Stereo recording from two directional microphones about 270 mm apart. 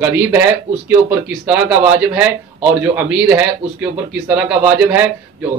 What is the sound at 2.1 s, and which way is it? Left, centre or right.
Speech, centre.